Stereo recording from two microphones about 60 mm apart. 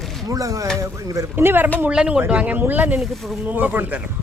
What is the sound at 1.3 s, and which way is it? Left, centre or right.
Speech, right.